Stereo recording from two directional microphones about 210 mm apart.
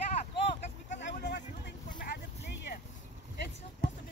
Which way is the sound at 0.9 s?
55° left (ahead or behind).